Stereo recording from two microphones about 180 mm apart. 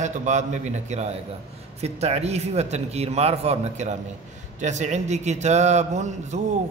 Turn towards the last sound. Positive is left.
turn(degrees=-40)  # may be behind; listen again after turning